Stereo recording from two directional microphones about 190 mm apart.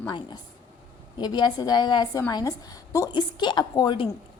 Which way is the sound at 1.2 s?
20° left (ahead or behind).